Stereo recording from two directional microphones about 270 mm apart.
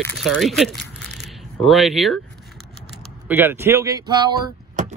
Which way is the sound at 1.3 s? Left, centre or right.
Centre.